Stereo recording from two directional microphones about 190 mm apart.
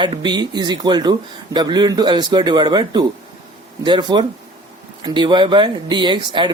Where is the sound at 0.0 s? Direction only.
25° right (ahead or behind).